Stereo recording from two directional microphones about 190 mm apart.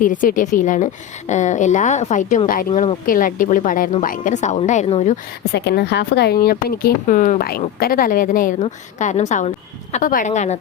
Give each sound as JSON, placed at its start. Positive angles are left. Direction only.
{"t": 0.0, "sound": "speech", "side_deg": 45}
{"t": 5.5, "sound": "speech", "side_deg": 60}